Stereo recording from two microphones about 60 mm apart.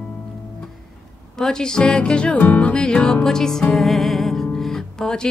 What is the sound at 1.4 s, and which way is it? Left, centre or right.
Music, centre.